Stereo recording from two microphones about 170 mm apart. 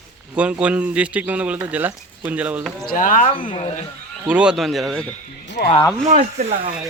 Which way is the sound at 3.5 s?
35° left (ahead or behind).